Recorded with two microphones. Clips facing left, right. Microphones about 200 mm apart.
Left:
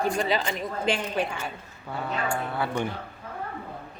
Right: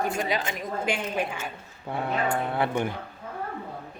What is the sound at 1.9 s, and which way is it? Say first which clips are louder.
Speech: right 2 dB; 20° right (ahead or behind).